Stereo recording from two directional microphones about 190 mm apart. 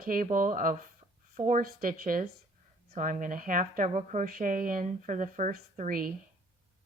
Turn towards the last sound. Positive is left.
turn(degrees=-45)  # may be behind; listen again after turning